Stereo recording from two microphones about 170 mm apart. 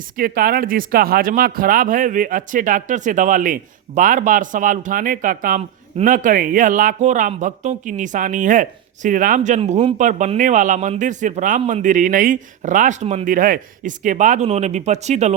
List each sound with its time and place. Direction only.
0.2 s speech: 60° right (ahead or behind); by 15.4 s 40° right (ahead or behind)